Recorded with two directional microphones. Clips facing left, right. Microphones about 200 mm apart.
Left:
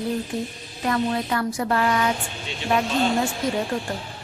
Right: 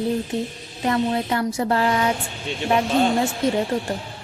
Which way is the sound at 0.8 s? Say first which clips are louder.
Right 2 dB; 25° right (ahead or behind).